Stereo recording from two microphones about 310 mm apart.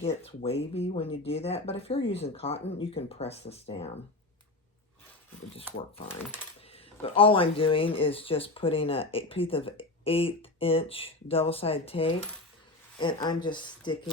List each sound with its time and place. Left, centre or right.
0.2 s speech: centre
6.7 s speech: centre